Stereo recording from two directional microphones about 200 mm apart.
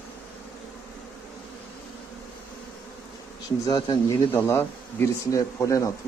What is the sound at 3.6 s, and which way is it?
Speech, 20° left (ahead or behind).